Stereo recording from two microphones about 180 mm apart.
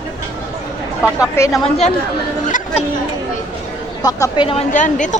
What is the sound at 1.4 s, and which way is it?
Speech, 15° left (ahead or behind).